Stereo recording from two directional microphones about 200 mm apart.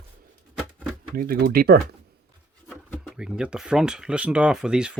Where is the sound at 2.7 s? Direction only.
Centre (ahead or behind).